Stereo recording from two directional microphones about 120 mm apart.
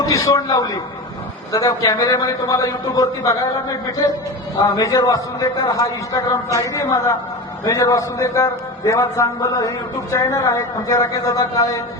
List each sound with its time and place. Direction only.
0.0 s a woman's voice: 30° left (ahead or behind)
4.7 s a woman's voice: 30° left (ahead or behind)